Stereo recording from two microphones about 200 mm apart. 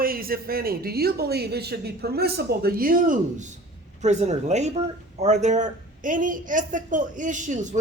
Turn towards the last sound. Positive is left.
turn(degrees=-40)  # may be behind; listen again after turning